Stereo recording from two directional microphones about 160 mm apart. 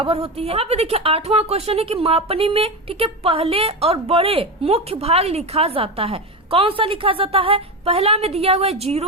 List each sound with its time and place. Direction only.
0.0 s a woman's voice: 40° right (ahead or behind)